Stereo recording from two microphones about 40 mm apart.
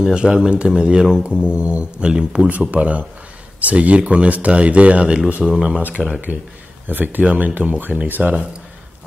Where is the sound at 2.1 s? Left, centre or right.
Centre.